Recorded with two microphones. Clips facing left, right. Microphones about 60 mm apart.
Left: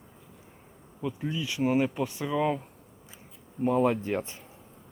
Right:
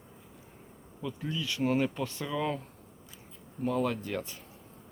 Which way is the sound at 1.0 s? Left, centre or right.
Centre.